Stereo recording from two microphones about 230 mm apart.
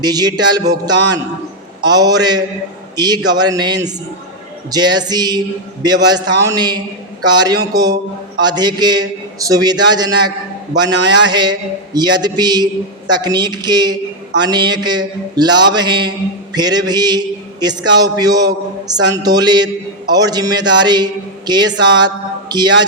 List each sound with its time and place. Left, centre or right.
0.0 s a man's voice: centre